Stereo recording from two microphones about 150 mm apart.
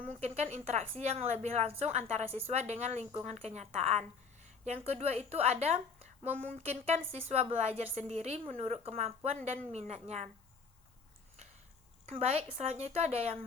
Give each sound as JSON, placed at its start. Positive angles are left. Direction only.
{"t": 0.1, "sound": "a woman's voice", "side_deg": -45}
{"t": 6.3, "sound": "a woman's voice", "side_deg": -55}
{"t": 12.1, "sound": "a woman's voice", "side_deg": -45}